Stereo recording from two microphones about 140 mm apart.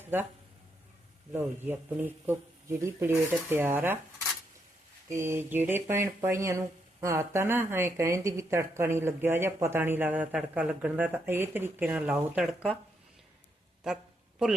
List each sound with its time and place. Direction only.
0.0 s speech: 15° right (ahead or behind)
1.3 s speech: 15° right (ahead or behind)
5.0 s speech: 20° right (ahead or behind)
13.8 s a sound: 5° right (ahead or behind)